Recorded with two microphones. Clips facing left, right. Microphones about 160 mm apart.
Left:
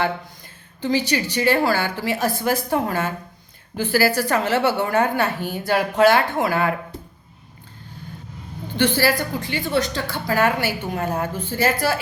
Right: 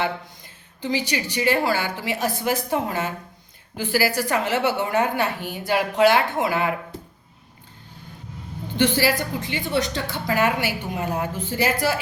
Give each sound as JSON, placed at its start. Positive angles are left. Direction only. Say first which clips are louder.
{"t": 0.8, "sound": "a woman's voice", "louder": "left 4 dB", "side_deg": -15}
{"t": 8.8, "sound": "a woman's voice", "louder": "left 1 dB", "side_deg": -15}